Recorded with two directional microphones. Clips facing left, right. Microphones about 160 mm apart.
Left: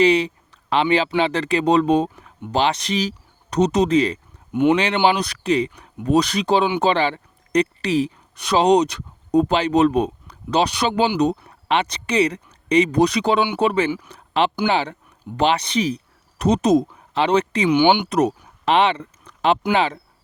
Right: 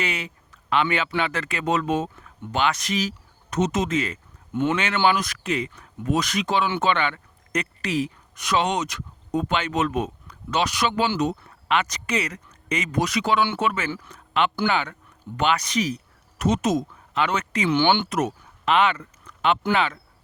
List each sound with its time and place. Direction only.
0.0 s a man's voice: 30° left (ahead or behind)
4.5 s speech: 15° left (ahead or behind)
5.0 s a man's voice: 30° left (ahead or behind)
14.1 s a sound: 35° left (ahead or behind)
14.7 s a man's voice: 30° left (ahead or behind)
17.7 s speech: 15° left (ahead or behind)
18.1 s a sound: 35° left (ahead or behind)
19.7 s a man's voice: 30° left (ahead or behind)